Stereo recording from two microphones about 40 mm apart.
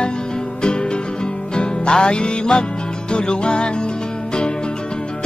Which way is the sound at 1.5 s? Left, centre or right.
Left.